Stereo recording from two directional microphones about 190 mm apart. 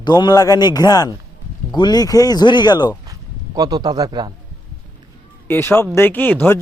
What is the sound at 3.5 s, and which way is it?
Speech, 20° right (ahead or behind).